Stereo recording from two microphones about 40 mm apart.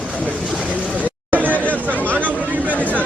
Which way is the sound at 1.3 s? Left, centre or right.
Right.